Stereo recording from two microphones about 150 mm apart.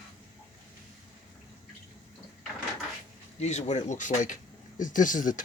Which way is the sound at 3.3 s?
50° left (ahead or behind).